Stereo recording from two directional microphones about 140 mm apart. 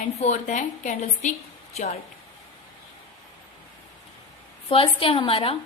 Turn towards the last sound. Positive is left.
turn(degrees=40)  # may be behind; listen again after turning